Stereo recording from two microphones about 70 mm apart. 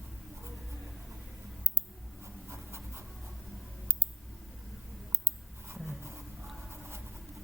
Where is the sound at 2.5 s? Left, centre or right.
Right.